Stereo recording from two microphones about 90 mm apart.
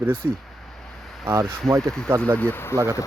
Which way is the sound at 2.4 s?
25° left (ahead or behind).